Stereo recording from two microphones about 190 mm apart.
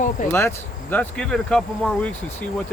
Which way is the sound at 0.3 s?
10° left (ahead or behind).